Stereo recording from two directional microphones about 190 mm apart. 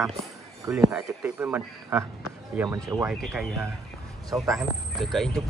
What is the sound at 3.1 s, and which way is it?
Speech, centre (ahead or behind).